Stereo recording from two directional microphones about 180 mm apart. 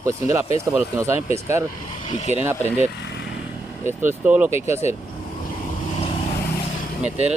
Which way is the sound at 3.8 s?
10° right (ahead or behind).